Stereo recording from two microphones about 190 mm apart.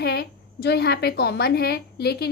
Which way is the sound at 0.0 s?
60° left (ahead or behind).